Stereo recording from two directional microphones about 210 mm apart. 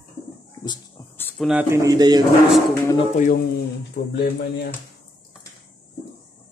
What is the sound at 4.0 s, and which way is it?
Speech, 55° left (ahead or behind).